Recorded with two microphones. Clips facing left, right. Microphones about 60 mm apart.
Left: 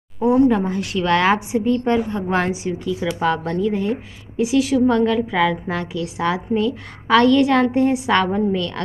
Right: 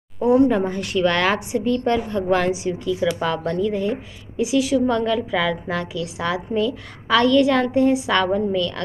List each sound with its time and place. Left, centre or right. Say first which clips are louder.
0.2 s a woman's voice: left 1 dB; centre; by 3.9 s left
4.4 s a woman's voice: left 2 dB; left